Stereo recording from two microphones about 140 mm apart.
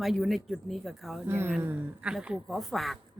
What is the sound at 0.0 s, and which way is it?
Speech, centre (ahead or behind).